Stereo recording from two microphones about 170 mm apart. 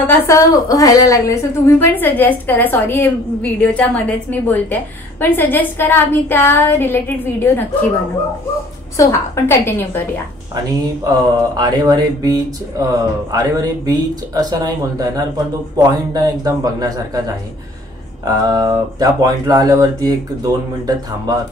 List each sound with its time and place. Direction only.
0.0 s a woman's voice: 20° left (ahead or behind)
8.9 s a woman's voice: 15° left (ahead or behind)
11.1 s speech: 25° right (ahead or behind)
18.2 s speech: 25° right (ahead or behind)